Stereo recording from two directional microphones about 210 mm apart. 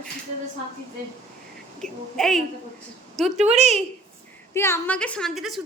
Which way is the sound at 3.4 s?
30° right (ahead or behind).